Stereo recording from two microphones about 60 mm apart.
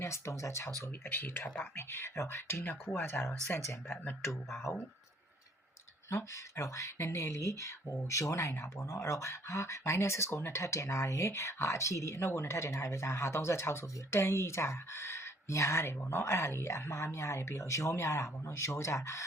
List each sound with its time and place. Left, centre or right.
0.0 s speech: left
1.0 s speech: left
1.7 s speech: left
3.5 s speech: left
6.1 s speech: left